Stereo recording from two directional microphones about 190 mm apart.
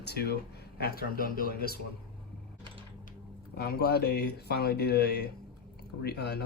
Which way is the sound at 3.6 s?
55° left (ahead or behind).